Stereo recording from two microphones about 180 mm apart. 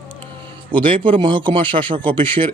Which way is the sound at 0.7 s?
25° right (ahead or behind).